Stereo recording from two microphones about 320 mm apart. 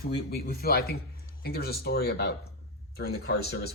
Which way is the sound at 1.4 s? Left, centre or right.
Left.